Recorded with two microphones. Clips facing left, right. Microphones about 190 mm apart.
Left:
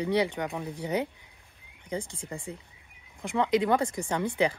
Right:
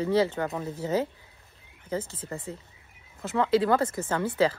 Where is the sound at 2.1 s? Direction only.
15° left (ahead or behind).